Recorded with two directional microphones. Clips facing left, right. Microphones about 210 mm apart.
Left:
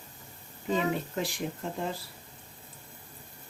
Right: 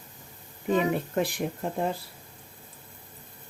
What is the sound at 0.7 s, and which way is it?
A woman's voice, 55° right (ahead or behind).